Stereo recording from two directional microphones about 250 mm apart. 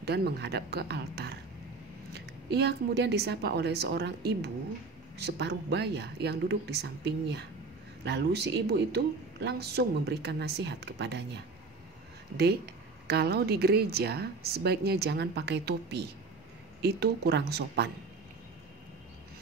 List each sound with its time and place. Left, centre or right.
0.0 s a woman's voice: right
13.0 s a woman's voice: right